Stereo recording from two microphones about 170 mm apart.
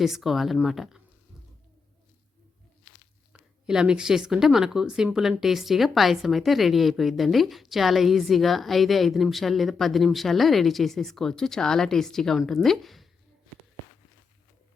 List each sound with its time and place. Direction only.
0.0 s a woman's voice: centre (ahead or behind)
3.7 s a woman's voice: 5° right (ahead or behind)